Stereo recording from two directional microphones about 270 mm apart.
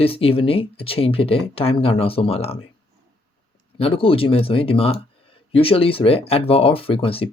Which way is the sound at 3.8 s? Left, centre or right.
Left.